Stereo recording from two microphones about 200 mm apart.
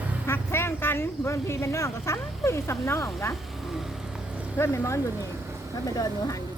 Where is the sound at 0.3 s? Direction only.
10° left (ahead or behind).